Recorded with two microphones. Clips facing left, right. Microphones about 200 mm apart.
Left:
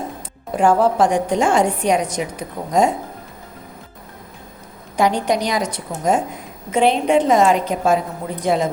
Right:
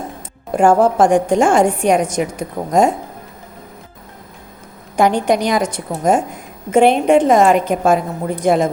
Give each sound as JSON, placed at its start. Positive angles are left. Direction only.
{"t": 0.5, "sound": "a woman's voice", "side_deg": -50}
{"t": 4.9, "sound": "a woman's voice", "side_deg": -50}